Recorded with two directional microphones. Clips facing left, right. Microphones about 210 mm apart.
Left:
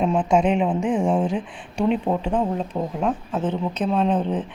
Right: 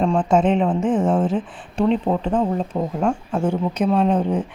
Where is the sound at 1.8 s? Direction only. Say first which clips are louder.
Right 2 dB; 5° left (ahead or behind).